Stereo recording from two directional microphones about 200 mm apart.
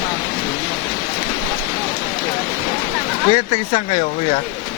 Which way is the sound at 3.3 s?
30° left (ahead or behind).